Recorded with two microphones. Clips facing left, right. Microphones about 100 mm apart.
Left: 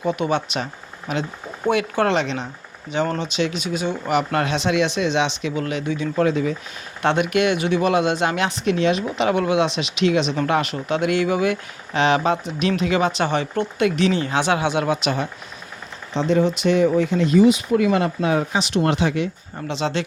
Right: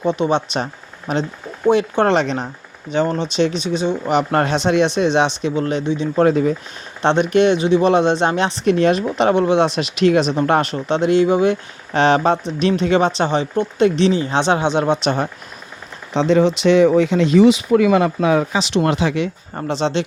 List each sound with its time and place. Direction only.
0.0 s speech: 25° right (ahead or behind)
3.0 s speech: 25° right (ahead or behind)
4.2 s speech: 35° right (ahead or behind)
6.2 s speech: 45° right (ahead or behind)
7.0 s speech: 30° right (ahead or behind)
8.7 s speech: 40° right (ahead or behind)
9.7 s speech: 45° right (ahead or behind); by 11.5 s 25° right (ahead or behind)
11.9 s speech: 35° right (ahead or behind)
13.2 s speech: 20° right (ahead or behind)
16.1 s speech: 90° right
18.2 s speech: 50° right (ahead or behind)
18.6 s speech: 90° right
19.6 s speech: 35° right (ahead or behind)